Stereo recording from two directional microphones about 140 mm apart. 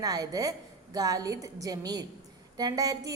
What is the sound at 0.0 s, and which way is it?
A woman's voice, 25° right (ahead or behind).